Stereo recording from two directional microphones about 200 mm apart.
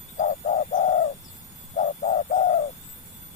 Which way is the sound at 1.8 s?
40° left (ahead or behind).